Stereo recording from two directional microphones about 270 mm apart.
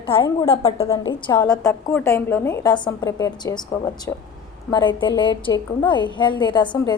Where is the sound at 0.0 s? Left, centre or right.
Centre.